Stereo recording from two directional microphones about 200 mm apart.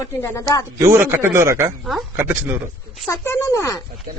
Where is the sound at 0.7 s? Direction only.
15° right (ahead or behind).